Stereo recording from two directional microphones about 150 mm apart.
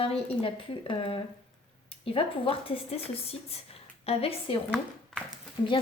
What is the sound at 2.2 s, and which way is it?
A woman's voice, 35° left (ahead or behind).